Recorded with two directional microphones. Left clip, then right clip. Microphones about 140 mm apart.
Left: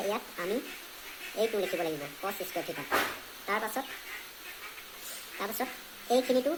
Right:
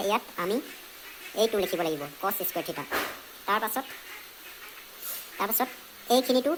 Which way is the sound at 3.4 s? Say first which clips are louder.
Right 5 dB; 40° right (ahead or behind).